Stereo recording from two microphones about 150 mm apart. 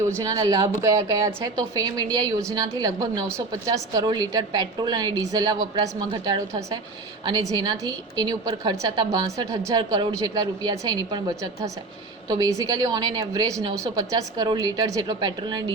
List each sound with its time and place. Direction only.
0.0 s a woman's voice: 20° right (ahead or behind)